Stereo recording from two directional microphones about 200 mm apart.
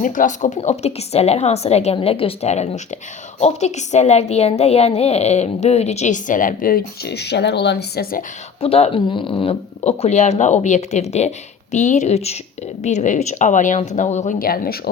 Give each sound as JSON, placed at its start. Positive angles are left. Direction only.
{"t": 0.0, "sound": "a woman's voice", "side_deg": 40}
{"t": 8.6, "sound": "a woman's voice", "side_deg": 30}